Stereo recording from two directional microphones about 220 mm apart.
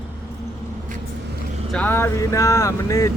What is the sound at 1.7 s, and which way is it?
Speech, 10° left (ahead or behind).